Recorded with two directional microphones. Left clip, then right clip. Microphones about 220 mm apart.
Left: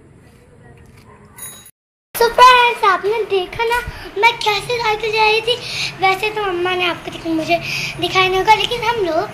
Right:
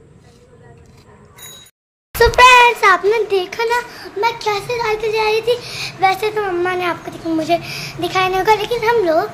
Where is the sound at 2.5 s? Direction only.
5° right (ahead or behind).